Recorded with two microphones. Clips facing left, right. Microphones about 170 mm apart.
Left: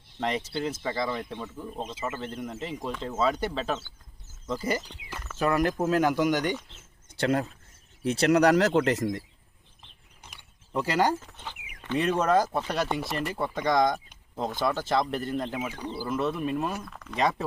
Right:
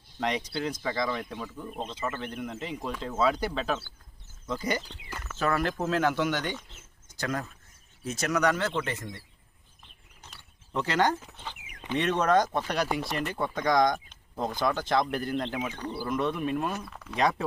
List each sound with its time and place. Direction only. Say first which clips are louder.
0.2 s speech: left 1 dB; centre (ahead or behind)
7.2 s speech: left 7 dB; 30° left (ahead or behind)
8.1 s speech: left 8 dB; 65° left (ahead or behind)
8.5 s speech: left 8 dB; 85° left
10.2 s mechanisms: even; 15° left (ahead or behind)
11.2 s speech: even; 10° right (ahead or behind)
11.9 s speech: left 1 dB; 5° left (ahead or behind)